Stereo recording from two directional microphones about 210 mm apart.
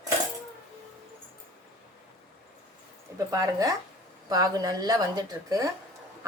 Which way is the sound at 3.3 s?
15° right (ahead or behind).